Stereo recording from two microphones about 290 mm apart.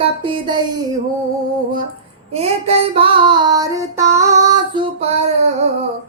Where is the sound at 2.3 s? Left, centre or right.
Right.